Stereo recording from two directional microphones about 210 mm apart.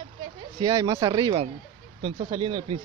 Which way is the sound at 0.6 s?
15° right (ahead or behind).